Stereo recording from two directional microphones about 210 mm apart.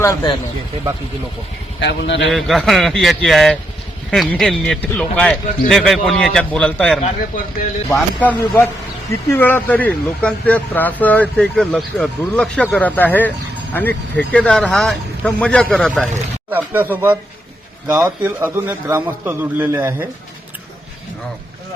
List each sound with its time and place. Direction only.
0.0 s speech: 15° left (ahead or behind)
1.8 s a man's voice: 55° left (ahead or behind)
2.3 s a man's voice: centre (ahead or behind)
16.5 s a man's voice: 10° right (ahead or behind)